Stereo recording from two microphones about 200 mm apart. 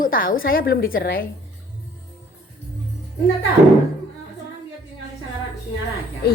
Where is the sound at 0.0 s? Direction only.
45° left (ahead or behind).